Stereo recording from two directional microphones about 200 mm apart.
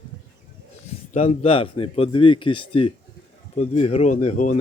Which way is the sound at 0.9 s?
35° left (ahead or behind).